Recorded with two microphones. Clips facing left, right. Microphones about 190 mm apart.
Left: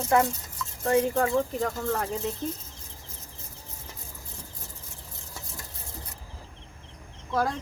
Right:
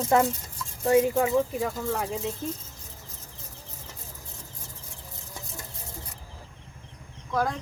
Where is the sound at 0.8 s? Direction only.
10° right (ahead or behind).